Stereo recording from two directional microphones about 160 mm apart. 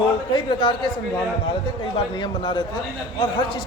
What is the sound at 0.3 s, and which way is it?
Speech, 30° left (ahead or behind).